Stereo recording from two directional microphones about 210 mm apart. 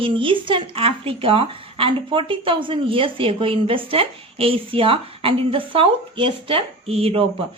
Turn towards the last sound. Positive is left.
turn(degrees=-30)  # may be behind; listen again after turning